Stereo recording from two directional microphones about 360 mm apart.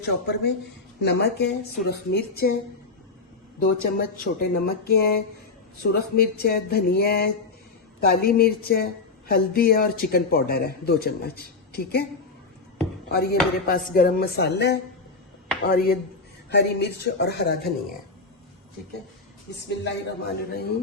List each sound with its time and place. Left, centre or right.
0.0 s speech: left
3.6 s speech: left
13.1 s speech: left
19.6 s speech: left